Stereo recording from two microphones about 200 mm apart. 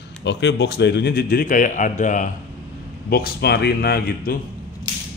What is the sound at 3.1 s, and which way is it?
A man's voice, 50° left (ahead or behind).